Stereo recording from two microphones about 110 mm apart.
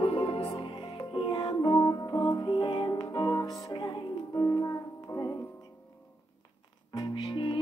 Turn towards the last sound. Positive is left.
turn(degrees=40)  # may be behind; listen again after turning